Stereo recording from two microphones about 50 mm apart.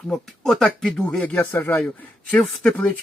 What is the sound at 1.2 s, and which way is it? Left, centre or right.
Speech, left.